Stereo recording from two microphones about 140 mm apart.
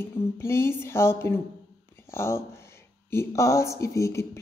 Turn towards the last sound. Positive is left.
turn(degrees=20)  # may be behind; listen again after turning